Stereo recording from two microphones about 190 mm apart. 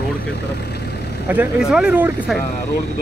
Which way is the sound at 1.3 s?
5° right (ahead or behind).